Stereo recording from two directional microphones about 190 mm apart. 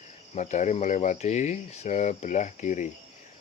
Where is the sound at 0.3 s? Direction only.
40° left (ahead or behind).